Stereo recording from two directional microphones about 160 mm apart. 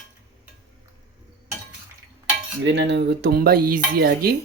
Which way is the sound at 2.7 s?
90° right.